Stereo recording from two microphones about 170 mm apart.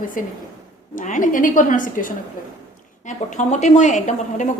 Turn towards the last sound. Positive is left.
turn(degrees=45)  # may be behind; listen again after turning